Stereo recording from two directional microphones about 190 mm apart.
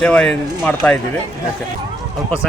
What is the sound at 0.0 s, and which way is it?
Speech, 5° left (ahead or behind).